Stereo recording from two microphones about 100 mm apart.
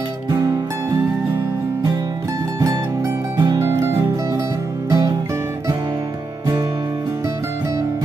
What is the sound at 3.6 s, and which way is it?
Music, 25° right (ahead or behind).